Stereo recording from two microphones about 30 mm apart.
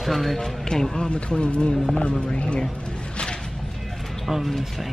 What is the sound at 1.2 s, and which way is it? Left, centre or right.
Speech, left.